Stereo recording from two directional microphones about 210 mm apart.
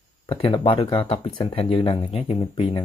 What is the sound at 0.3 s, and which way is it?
Speech, 25° left (ahead or behind).